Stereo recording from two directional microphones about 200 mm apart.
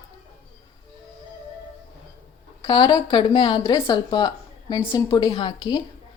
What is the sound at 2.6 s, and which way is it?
A woman's voice, 20° left (ahead or behind).